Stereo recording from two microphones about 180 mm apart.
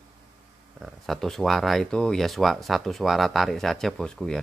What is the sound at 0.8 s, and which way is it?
Speech, centre (ahead or behind).